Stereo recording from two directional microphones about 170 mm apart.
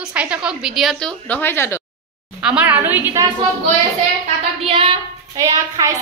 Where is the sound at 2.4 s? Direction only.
10° right (ahead or behind).